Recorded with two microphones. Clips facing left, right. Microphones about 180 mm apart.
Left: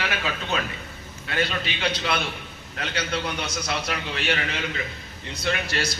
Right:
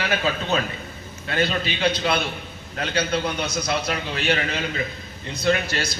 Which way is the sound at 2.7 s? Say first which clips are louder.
Right 5 dB; 45° right (ahead or behind).